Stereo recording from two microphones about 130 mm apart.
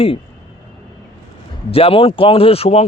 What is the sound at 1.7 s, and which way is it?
A man's voice, 45° left (ahead or behind).